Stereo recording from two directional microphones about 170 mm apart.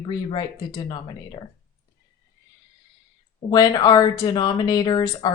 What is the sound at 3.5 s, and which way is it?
Speech, 25° left (ahead or behind).